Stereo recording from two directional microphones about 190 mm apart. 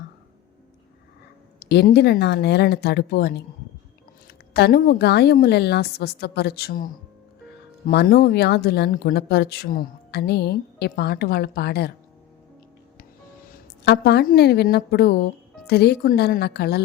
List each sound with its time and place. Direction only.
1.5 s speech: 60° left (ahead or behind)
13.8 s speech: 60° left (ahead or behind)